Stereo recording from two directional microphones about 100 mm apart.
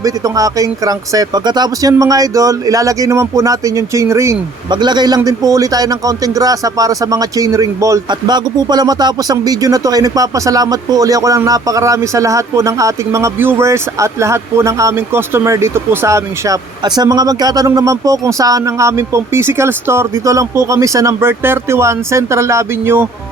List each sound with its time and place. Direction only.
0.0 s speech: 35° right (ahead or behind)
4.7 s speech: 45° right (ahead or behind)
8.1 s speech: 45° right (ahead or behind)
16.8 s speech: 45° right (ahead or behind); by 23.0 s 25° right (ahead or behind)